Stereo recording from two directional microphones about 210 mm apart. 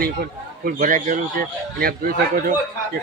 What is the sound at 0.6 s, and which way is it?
Speech, 40° right (ahead or behind).